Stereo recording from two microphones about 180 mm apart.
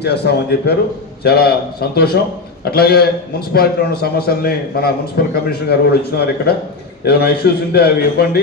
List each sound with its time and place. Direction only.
0.0 s a man's voice: 65° left (ahead or behind)